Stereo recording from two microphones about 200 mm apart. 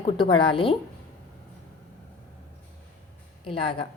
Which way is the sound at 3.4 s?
25° left (ahead or behind).